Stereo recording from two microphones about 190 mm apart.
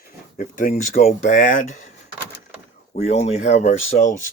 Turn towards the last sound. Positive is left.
turn(degrees=40)  # may be behind; listen again after turning